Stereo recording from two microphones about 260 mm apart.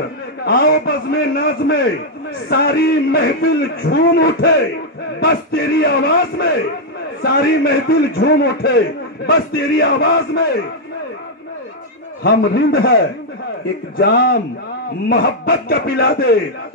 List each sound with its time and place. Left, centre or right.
0.5 s a man's voice: left
12.2 s a man's voice: left